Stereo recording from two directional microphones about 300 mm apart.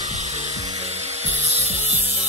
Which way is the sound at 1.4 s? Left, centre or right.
Right.